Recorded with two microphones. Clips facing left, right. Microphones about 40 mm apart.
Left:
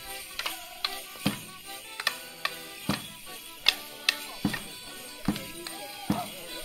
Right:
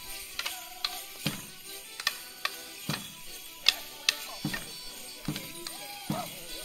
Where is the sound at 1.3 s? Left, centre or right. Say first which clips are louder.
Left 5 dB; centre.